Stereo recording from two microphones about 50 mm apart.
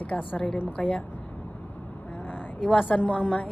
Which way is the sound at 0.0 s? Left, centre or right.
Left.